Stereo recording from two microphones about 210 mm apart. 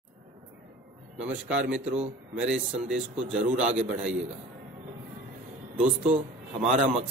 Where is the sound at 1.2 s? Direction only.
5° right (ahead or behind).